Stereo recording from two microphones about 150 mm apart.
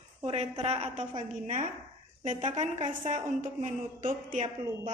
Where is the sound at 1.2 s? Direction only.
60° right (ahead or behind).